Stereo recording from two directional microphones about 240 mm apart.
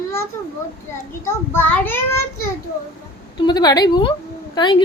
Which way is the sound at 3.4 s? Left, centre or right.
Centre.